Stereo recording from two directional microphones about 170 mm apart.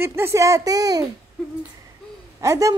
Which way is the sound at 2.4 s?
20° right (ahead or behind).